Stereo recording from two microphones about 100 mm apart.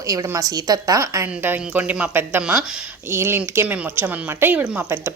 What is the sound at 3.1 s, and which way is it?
Speech, 25° right (ahead or behind).